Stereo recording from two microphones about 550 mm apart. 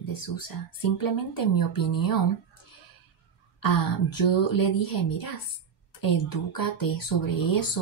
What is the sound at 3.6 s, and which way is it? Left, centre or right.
Speech, left.